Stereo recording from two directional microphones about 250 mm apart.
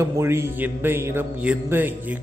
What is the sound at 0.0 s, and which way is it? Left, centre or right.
A man's voice, centre.